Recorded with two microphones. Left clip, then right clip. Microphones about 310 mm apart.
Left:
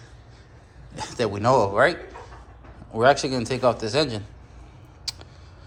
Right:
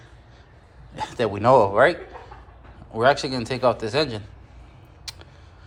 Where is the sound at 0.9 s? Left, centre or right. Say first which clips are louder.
Right 2 dB; centre.